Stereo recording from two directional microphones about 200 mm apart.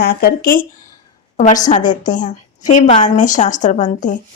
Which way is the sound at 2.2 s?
40° left (ahead or behind).